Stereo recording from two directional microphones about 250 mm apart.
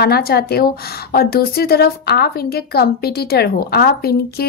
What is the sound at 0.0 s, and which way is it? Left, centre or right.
A woman's voice, left.